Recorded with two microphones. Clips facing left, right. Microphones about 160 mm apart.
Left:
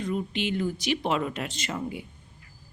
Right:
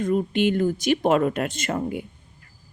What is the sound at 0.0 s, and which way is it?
A woman's voice, 45° right (ahead or behind).